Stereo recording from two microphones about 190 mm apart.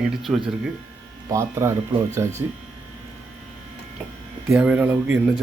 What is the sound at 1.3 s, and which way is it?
Speech, 15° right (ahead or behind).